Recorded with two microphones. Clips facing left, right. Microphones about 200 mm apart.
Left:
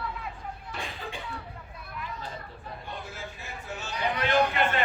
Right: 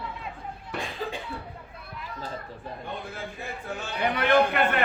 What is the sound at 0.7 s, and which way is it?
Cough, 60° right (ahead or behind).